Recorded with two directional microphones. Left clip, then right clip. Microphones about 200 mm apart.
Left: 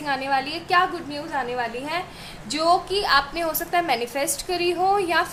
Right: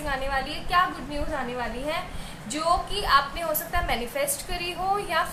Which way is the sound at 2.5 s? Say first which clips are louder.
Left 5 dB; 60° left (ahead or behind).